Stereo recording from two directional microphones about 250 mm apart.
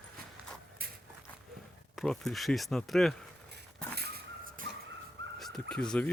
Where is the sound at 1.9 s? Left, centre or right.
Centre.